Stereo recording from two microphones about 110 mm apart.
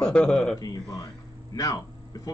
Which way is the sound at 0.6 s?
35° left (ahead or behind).